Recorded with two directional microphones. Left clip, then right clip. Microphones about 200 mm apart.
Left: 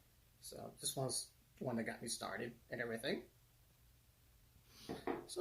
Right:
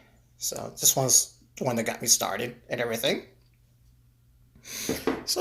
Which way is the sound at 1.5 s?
5° right (ahead or behind).